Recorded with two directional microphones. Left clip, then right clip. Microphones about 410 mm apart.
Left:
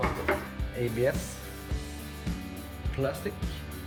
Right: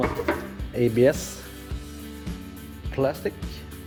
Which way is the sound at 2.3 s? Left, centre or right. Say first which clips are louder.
Left 2 dB; centre.